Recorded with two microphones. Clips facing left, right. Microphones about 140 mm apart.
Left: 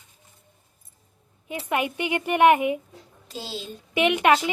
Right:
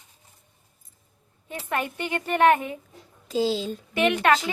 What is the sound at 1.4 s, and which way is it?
A woman's voice, 15° left (ahead or behind).